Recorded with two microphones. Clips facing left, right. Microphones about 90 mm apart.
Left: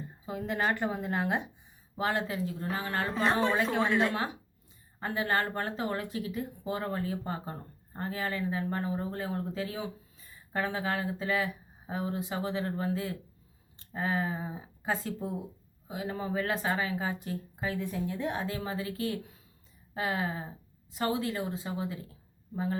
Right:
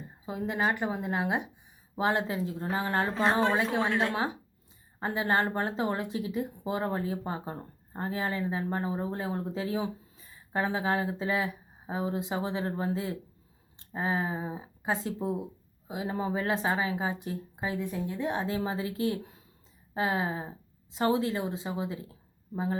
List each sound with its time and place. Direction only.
0.3 s speech: 15° right (ahead or behind)
2.0 s speech: 25° right (ahead or behind)